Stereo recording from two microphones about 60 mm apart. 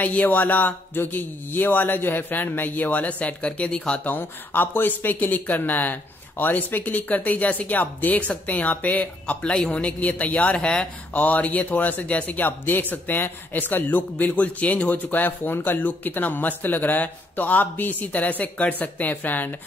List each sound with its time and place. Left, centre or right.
0.0 s speech: left
4.0 s speech: left
9.5 s speech: centre
11.1 s speech: left